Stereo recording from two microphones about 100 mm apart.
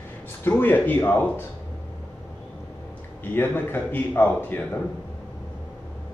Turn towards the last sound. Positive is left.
turn(degrees=20)  # may be behind; listen again after turning